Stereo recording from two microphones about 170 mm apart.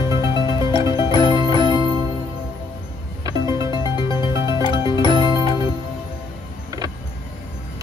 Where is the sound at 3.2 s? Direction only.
20° right (ahead or behind).